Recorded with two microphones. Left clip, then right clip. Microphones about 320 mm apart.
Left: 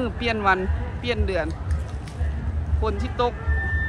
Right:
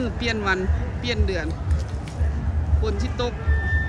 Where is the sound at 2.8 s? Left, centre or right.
Centre.